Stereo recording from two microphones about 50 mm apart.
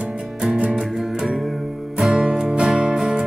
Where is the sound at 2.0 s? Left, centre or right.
Centre.